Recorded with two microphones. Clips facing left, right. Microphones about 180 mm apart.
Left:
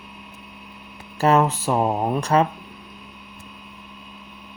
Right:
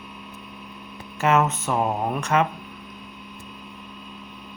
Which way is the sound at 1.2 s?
35° left (ahead or behind).